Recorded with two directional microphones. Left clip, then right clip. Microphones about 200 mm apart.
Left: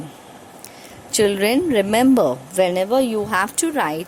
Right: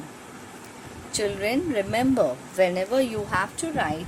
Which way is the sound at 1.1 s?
45° left (ahead or behind).